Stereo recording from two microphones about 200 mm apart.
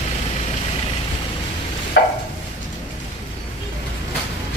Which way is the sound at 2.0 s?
60° left (ahead or behind).